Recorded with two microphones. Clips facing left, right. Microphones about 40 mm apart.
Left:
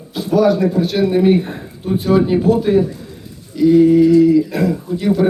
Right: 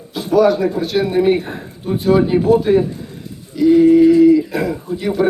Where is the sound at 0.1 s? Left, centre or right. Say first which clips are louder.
Right 1 dB; centre.